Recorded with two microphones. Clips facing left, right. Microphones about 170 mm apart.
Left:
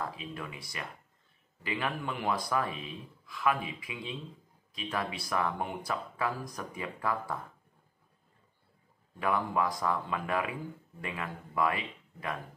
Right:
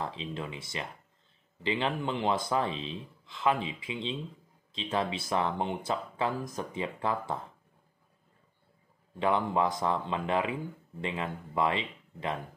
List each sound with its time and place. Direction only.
0.0 s speech: 25° right (ahead or behind)
9.2 s speech: 25° right (ahead or behind)